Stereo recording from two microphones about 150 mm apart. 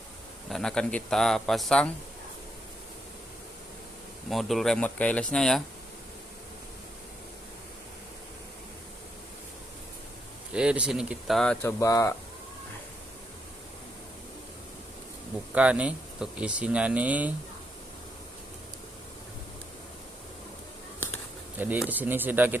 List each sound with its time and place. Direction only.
0.4 s speech: 5° left (ahead or behind)
4.3 s speech: centre (ahead or behind)
10.5 s speech: 5° right (ahead or behind)
11.6 s speech: 20° left (ahead or behind)
15.5 s speech: 10° right (ahead or behind)
21.6 s speech: 10° right (ahead or behind)